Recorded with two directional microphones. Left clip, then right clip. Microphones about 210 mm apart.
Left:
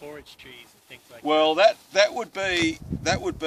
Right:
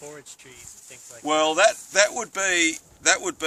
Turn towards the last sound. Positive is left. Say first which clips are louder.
# right 3 dB
turn(degrees=-5)  # may be behind; listen again after turning